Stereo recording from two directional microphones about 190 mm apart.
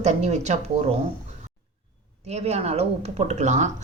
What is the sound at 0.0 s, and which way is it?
Speech, 35° right (ahead or behind).